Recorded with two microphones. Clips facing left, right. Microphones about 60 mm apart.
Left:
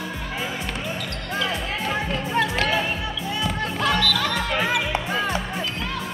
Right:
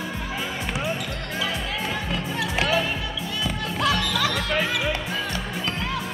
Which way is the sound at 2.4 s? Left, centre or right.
Centre.